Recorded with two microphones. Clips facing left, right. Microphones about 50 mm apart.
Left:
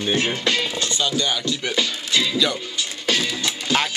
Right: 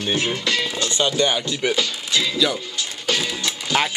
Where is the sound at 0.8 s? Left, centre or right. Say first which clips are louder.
Right 3 dB; right.